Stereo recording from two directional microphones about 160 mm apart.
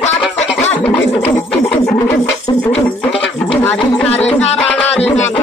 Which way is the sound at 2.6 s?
10° left (ahead or behind).